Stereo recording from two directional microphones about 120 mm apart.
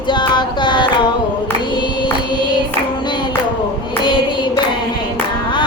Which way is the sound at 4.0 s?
40° left (ahead or behind).